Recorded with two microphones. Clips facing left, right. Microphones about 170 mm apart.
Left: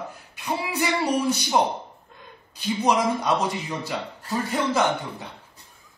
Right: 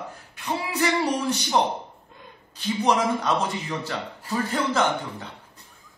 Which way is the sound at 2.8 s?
10° left (ahead or behind).